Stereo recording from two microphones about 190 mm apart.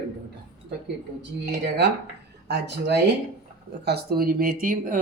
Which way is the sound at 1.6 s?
60° right (ahead or behind).